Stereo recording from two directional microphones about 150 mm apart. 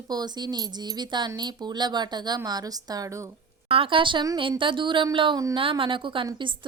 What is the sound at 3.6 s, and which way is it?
A woman's voice, 40° right (ahead or behind).